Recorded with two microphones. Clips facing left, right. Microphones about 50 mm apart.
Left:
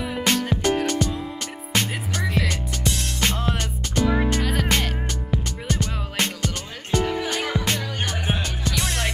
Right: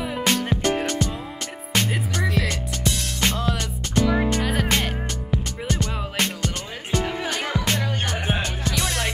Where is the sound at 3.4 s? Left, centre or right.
Left.